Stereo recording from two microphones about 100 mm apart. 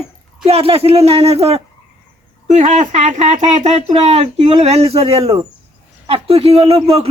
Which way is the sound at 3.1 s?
90° right.